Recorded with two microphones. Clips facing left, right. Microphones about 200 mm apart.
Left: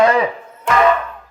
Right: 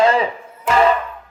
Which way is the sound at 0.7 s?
Centre (ahead or behind).